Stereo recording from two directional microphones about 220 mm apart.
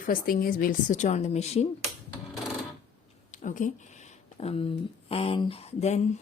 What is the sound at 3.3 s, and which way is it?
A woman's voice, 35° left (ahead or behind).